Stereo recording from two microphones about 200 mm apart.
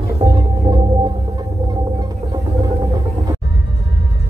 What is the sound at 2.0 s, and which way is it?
Music, 15° right (ahead or behind).